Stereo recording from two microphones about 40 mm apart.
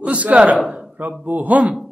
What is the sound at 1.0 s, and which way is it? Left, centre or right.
Speech, right.